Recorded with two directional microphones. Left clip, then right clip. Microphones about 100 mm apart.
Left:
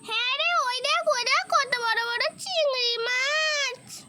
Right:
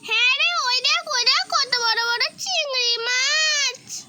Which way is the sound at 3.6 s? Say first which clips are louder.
Right 5 dB; 85° left.